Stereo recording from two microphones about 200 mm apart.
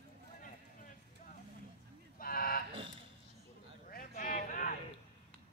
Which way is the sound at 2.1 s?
45° left (ahead or behind).